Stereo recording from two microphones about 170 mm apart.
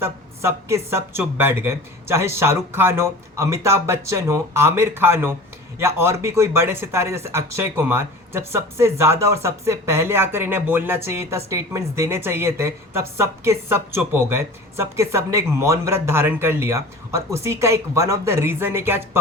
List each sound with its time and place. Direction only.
0.0 s speech: 15° right (ahead or behind)